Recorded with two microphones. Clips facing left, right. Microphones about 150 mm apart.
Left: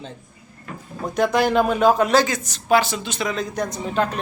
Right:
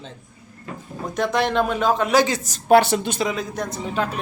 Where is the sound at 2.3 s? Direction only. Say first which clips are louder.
Right 1 dB; 40° right (ahead or behind).